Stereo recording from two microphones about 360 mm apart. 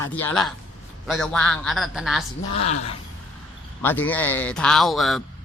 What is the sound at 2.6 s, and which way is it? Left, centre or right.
Speech, left.